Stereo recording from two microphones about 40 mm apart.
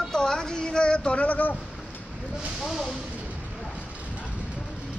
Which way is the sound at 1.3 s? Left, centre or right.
Left.